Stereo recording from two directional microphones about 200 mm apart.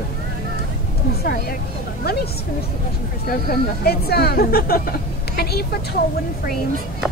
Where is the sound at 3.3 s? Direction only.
50° left (ahead or behind).